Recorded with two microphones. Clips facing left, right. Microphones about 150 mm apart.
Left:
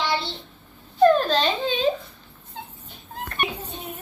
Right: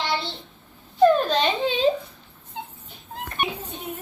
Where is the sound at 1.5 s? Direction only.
25° right (ahead or behind).